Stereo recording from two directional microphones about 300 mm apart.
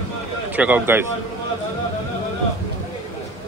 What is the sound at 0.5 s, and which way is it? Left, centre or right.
Speech, centre.